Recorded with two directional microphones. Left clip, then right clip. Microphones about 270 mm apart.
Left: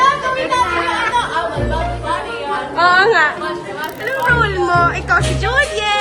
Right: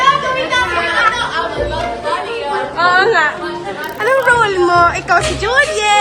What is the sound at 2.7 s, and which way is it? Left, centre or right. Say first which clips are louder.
Chatter: even; centre.